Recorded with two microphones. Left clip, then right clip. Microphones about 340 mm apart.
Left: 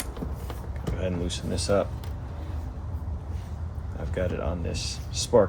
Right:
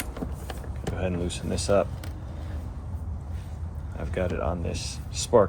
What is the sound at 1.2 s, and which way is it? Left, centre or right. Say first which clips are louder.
Speech: right 1 dB; centre.